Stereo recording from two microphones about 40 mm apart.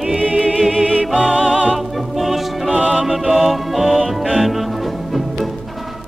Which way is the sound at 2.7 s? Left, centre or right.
Right.